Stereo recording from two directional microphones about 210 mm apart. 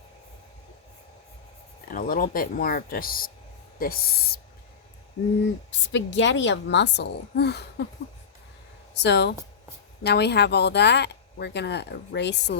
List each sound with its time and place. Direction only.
1.9 s speech: 40° left (ahead or behind)
5.7 s a woman's voice: 60° left (ahead or behind)
9.0 s a woman's voice: 55° left (ahead or behind)